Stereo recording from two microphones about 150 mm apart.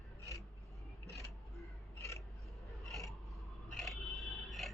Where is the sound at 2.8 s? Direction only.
Centre (ahead or behind).